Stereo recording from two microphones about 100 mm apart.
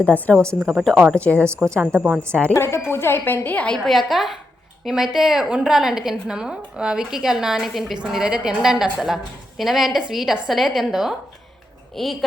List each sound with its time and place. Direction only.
0.0 s speech: 15° left (ahead or behind)
1.6 s a woman's voice: 25° right (ahead or behind)
2.5 s a woman's voice: 25° left (ahead or behind)
3.8 s a woman's voice: centre (ahead or behind)